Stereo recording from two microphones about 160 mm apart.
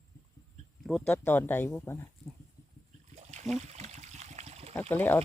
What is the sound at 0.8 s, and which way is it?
Speech, 5° left (ahead or behind).